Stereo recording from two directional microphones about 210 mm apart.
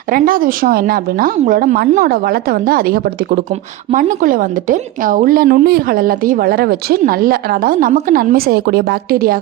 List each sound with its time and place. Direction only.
0.1 s a woman's voice: 40° right (ahead or behind)